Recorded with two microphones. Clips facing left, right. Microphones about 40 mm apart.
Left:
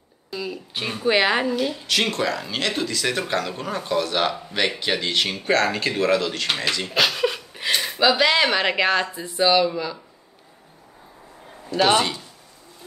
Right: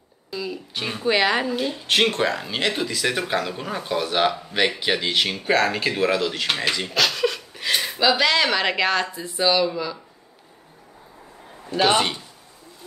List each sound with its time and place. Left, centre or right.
0.3 s speech: centre
1.9 s speech: right
2.7 s speech: centre
6.9 s a sound: centre
7.7 s speech: centre
11.7 s speech: centre